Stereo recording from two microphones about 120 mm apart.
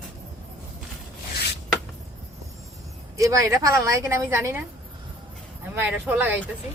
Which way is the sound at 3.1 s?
25° right (ahead or behind).